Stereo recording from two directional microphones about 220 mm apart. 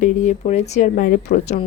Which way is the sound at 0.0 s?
30° left (ahead or behind).